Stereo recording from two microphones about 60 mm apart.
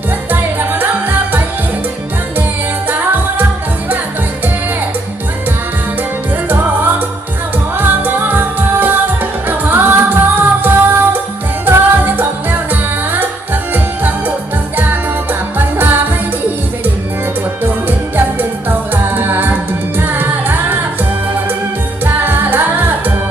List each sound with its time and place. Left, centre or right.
0.3 s music: right
2.9 s music: right
6.5 s music: right
18.3 s music: right
22.0 s music: right